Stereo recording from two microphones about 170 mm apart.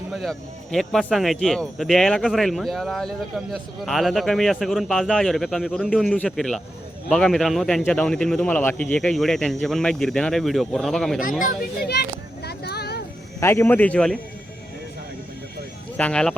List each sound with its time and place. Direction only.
0.1 s speech: centre (ahead or behind)
11.2 s a sound: 55° left (ahead or behind); by 13.1 s 70° left (ahead or behind)
13.4 s a man's voice: 15° left (ahead or behind)
16.0 s a man's voice: 5° left (ahead or behind)